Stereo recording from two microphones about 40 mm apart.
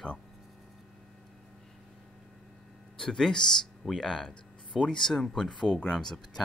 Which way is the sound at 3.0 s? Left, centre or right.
Centre.